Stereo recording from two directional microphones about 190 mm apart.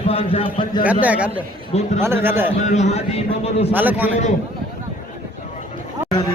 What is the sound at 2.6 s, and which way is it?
A man's voice, 35° left (ahead or behind).